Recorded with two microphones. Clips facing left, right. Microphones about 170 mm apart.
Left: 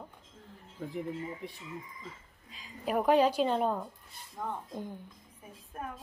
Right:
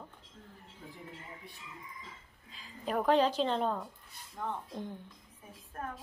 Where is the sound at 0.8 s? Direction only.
90° left.